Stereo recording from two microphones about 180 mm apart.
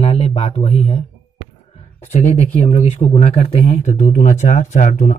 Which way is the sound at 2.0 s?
35° left (ahead or behind).